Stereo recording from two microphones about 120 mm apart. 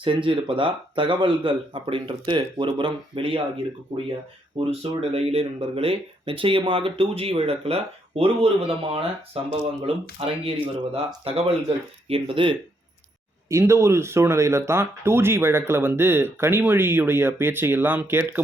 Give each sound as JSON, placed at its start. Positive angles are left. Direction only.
{"t": 0.0, "sound": "speech", "side_deg": -45}
{"t": 4.8, "sound": "speech", "side_deg": -55}
{"t": 13.5, "sound": "speech", "side_deg": -25}